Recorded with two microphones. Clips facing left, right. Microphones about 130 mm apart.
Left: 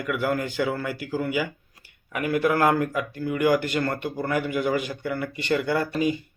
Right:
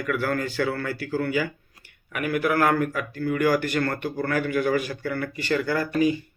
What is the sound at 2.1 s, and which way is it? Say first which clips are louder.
Speech: left 1 dB; 25° left (ahead or behind).